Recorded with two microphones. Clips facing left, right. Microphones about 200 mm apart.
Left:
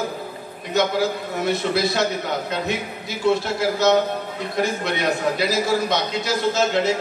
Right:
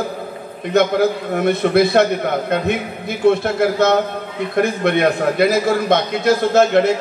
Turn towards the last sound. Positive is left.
turn(degrees=-55)  # may be behind; listen again after turning